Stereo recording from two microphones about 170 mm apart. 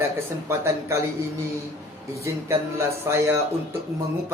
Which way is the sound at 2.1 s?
15° right (ahead or behind).